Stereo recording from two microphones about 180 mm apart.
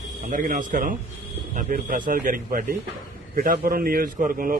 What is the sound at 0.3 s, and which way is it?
A man's voice, 50° right (ahead or behind).